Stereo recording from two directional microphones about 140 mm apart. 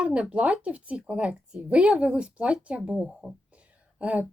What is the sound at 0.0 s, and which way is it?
Speech, 10° right (ahead or behind).